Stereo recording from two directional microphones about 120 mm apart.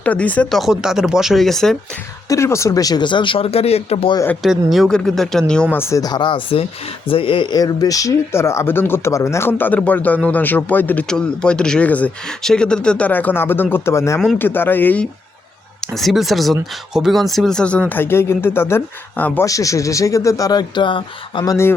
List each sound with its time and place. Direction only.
0.0 s speech: 10° left (ahead or behind)
0.6 s speech: 5° right (ahead or behind)
2.3 s speech: 25° left (ahead or behind); by 4.1 s 55° left (ahead or behind)
4.4 s speech: centre (ahead or behind)
5.7 s speech: 20° left (ahead or behind)
6.0 s speech: 35° left (ahead or behind)
7.5 s speech: 35° left (ahead or behind); by 15.0 s 15° left (ahead or behind)
16.0 s speech: centre (ahead or behind)
19.5 s speech: 30° left (ahead or behind)
21.4 s speech: 25° left (ahead or behind)